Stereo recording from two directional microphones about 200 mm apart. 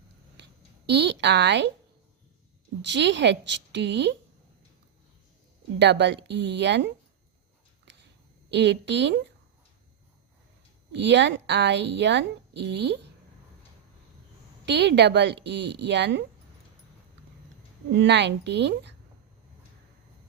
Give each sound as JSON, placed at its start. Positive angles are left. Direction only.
{"t": 0.4, "sound": "a sound", "side_deg": -60}
{"t": 0.9, "sound": "a woman's voice", "side_deg": -60}
{"t": 2.8, "sound": "a woman's voice", "side_deg": -60}
{"t": 5.8, "sound": "a woman's voice", "side_deg": -60}
{"t": 8.4, "sound": "a woman's voice", "side_deg": -60}
{"t": 10.9, "sound": "a woman's voice", "side_deg": -60}
{"t": 14.6, "sound": "a woman's voice", "side_deg": -55}
{"t": 17.9, "sound": "a woman's voice", "side_deg": -60}